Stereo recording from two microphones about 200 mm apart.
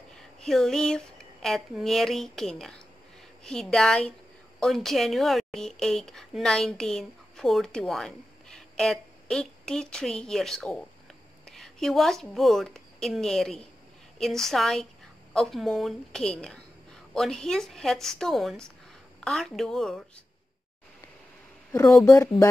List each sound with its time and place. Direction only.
0.4 s a woman's voice: centre (ahead or behind)
22.0 s speech: 15° left (ahead or behind)